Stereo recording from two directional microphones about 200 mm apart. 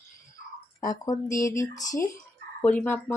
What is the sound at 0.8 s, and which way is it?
Speech, 15° left (ahead or behind).